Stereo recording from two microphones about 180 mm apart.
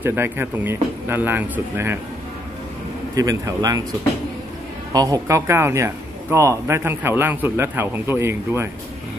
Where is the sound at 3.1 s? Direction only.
20° right (ahead or behind).